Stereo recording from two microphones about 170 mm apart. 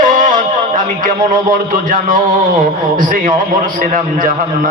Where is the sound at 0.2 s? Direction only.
50° right (ahead or behind).